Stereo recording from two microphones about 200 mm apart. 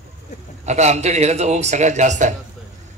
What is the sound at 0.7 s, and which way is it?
A man's voice, 35° right (ahead or behind).